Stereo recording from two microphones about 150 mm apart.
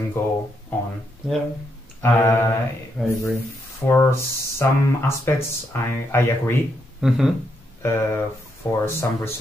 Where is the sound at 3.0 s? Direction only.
5° right (ahead or behind).